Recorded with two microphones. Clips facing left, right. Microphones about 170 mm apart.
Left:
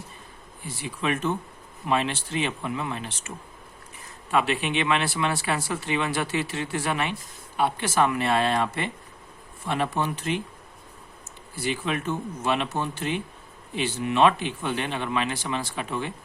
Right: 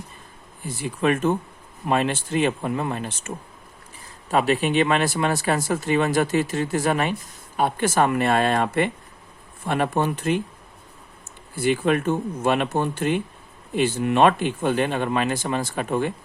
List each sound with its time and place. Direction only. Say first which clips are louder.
0.6 s speech: right 7 dB; 50° right (ahead or behind)
11.5 s speech: right 8 dB; 55° right (ahead or behind)